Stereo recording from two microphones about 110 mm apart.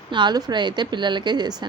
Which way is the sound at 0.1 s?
45° right (ahead or behind).